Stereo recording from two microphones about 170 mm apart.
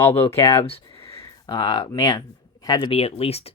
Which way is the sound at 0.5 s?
35° left (ahead or behind).